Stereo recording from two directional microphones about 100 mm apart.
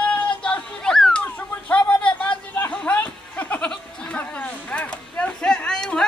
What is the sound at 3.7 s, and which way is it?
Sheep, 10° left (ahead or behind).